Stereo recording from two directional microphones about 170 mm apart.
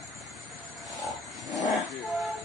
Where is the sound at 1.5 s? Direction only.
20° left (ahead or behind).